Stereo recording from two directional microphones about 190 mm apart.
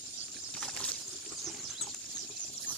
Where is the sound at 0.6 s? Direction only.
5° left (ahead or behind).